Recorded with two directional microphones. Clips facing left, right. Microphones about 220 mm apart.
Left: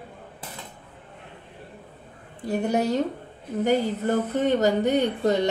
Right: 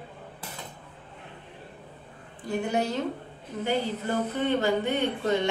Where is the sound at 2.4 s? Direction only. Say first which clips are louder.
Left 4 dB; 40° left (ahead or behind).